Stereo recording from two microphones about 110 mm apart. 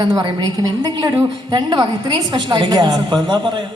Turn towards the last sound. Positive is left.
turn(degrees=-45)  # may be behind; listen again after turning